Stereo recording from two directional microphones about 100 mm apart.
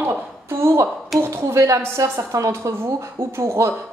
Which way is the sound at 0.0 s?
25° right (ahead or behind).